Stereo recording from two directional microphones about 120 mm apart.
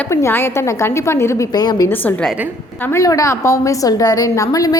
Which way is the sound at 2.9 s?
30° left (ahead or behind).